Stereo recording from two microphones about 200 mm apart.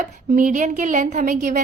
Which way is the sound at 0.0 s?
40° right (ahead or behind).